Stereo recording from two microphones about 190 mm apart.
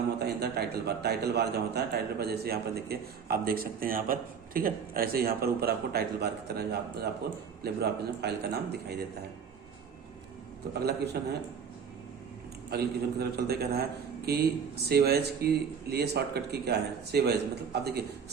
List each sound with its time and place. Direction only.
0.2 s a man's voice: 60° right (ahead or behind)
10.8 s a man's voice: 60° right (ahead or behind)
12.7 s a man's voice: 60° right (ahead or behind)
14.8 s a man's voice: 55° right (ahead or behind)